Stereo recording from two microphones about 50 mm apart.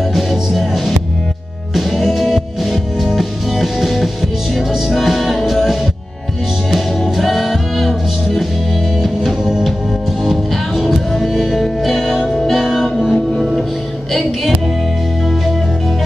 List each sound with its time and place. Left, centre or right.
0.1 s music: centre
9.0 s music: centre